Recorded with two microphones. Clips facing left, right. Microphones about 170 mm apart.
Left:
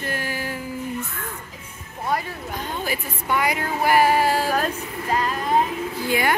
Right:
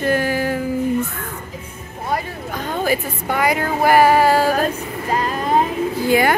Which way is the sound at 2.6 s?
75° right (ahead or behind).